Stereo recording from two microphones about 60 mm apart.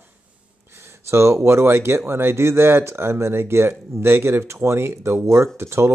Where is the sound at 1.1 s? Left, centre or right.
Right.